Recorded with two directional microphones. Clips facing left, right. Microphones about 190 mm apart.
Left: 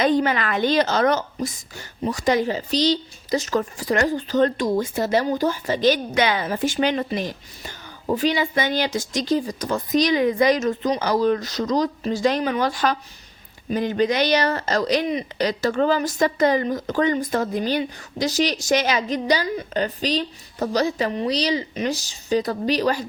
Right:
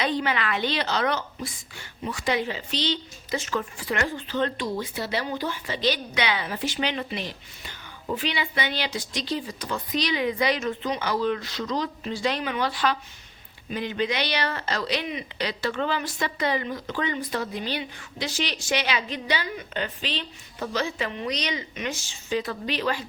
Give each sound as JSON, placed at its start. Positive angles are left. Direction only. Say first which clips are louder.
{"t": 0.0, "sound": "a woman's voice", "louder": "left 7 dB", "side_deg": 45}